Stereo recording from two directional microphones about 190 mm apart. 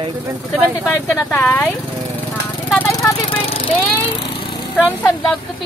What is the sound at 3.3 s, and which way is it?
Lawn mower, 30° left (ahead or behind).